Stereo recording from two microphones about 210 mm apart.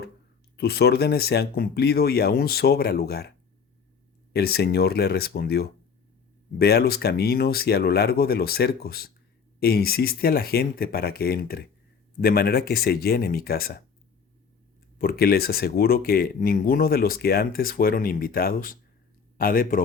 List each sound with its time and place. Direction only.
0.5 s speech: 50° left (ahead or behind)
14.9 s speech: 45° left (ahead or behind)